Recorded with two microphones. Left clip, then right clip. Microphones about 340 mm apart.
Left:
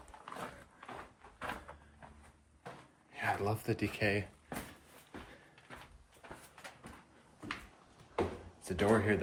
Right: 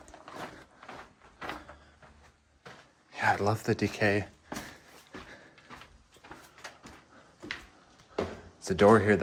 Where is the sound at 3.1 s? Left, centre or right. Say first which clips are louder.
Right 8 dB; centre.